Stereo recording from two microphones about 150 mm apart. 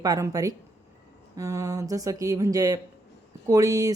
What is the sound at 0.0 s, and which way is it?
Speech, 25° right (ahead or behind).